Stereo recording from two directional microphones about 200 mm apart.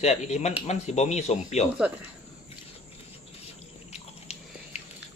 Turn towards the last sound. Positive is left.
turn(degrees=30)  # may be behind; listen again after turning